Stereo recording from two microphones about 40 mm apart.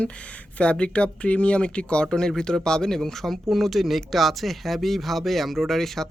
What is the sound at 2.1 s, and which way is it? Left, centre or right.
Speech, centre.